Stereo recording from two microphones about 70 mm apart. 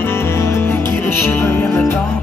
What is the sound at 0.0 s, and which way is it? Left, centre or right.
Music, left.